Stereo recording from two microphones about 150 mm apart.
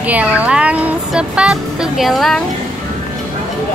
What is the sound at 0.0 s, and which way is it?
Speech, 10° right (ahead or behind).